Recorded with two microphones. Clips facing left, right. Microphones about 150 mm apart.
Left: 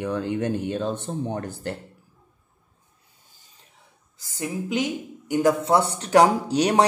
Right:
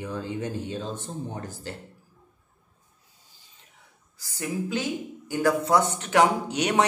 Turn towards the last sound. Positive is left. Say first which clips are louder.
# left 4 dB
turn(degrees=35)  # may be behind; listen again after turning